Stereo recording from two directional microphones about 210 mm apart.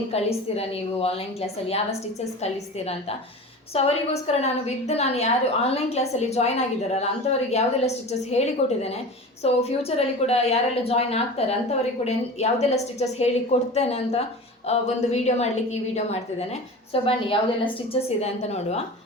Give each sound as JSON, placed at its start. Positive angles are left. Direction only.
{"t": 0.1, "sound": "a woman's voice", "side_deg": 30}